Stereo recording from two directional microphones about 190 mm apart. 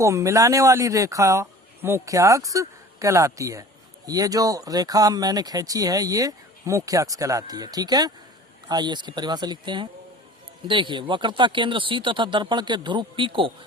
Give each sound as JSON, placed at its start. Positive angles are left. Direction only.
{"t": 0.0, "sound": "speech", "side_deg": -15}